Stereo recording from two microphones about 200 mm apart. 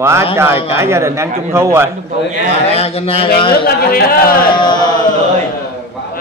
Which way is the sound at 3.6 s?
50° left (ahead or behind).